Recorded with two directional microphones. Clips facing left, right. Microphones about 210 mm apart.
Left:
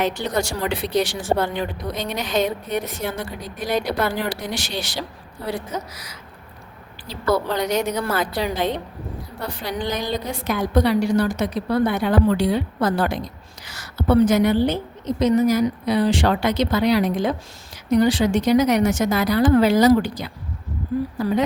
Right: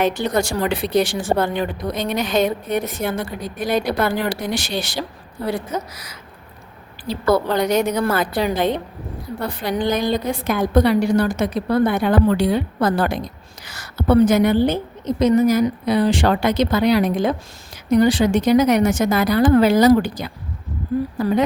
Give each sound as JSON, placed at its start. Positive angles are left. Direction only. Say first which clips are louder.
{"t": 0.0, "sound": "a woman's voice", "louder": "right 3 dB", "side_deg": -50}
{"t": 7.1, "sound": "a woman's voice", "louder": "right 4 dB", "side_deg": -55}